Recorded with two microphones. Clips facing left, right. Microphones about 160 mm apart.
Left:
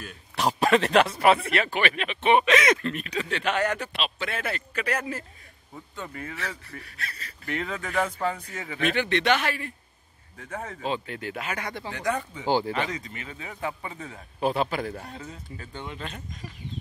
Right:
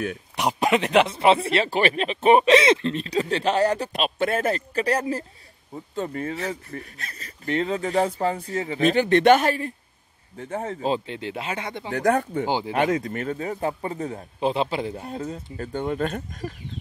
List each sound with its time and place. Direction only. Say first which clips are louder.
0.4 s speech: even; 20° right (ahead or behind); by 7.5 s 40° right (ahead or behind)
7.5 s speech: right 6 dB; 30° right (ahead or behind)
10.3 s speech: right 7 dB; 30° right (ahead or behind)
11.9 s speech: right 9 dB; 50° right (ahead or behind)
12.4 s speech: left 1 dB; 15° right (ahead or behind)
12.7 s speech: right 8 dB; 55° right (ahead or behind)
14.4 s speech: right 2 dB; 25° right (ahead or behind)
15.1 s speech: right 9 dB; 45° right (ahead or behind)